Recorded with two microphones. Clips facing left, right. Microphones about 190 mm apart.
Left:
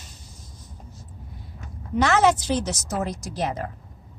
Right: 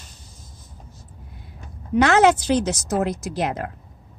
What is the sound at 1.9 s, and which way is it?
Speech, 60° right (ahead or behind).